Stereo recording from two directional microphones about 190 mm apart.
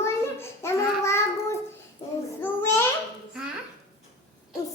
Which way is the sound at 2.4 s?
10° left (ahead or behind).